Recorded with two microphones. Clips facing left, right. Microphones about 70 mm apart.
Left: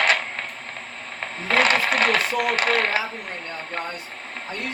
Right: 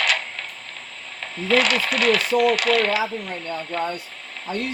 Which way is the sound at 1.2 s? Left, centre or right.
Left.